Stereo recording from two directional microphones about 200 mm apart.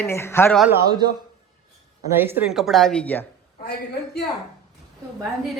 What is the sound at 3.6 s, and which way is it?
Speech, 55° left (ahead or behind).